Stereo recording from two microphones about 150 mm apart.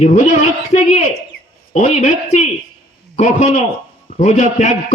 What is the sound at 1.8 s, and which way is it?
A man's voice, 50° left (ahead or behind).